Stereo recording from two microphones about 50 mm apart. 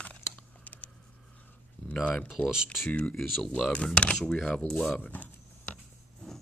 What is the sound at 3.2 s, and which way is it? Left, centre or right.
Speech, centre.